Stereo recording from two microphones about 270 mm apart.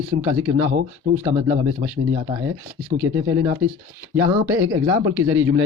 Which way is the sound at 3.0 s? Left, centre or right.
Centre.